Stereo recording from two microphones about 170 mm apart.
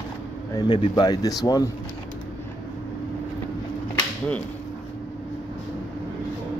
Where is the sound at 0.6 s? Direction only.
25° left (ahead or behind).